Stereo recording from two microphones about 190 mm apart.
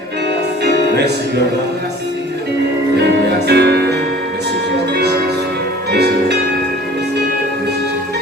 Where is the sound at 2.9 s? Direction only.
60° right (ahead or behind).